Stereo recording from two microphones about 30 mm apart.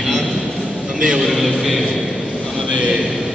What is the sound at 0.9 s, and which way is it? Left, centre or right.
Speech, right.